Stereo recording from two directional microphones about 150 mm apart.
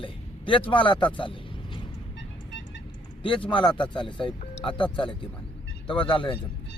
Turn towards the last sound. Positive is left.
turn(degrees=35)  # may be behind; listen again after turning